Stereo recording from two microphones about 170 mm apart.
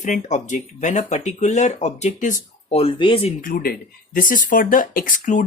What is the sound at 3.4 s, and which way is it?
Speech, 60° left (ahead or behind).